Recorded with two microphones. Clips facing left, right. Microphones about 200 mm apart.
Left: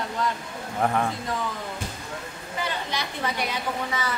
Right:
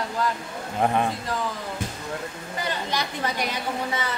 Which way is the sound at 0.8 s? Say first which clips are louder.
Right 2 dB; 20° right (ahead or behind).